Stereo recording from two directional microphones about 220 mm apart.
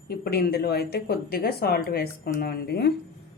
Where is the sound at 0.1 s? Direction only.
45° left (ahead or behind).